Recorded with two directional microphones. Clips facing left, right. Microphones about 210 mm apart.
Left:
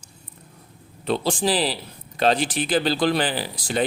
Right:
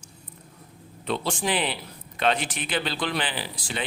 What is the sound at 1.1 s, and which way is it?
Speech, 35° left (ahead or behind).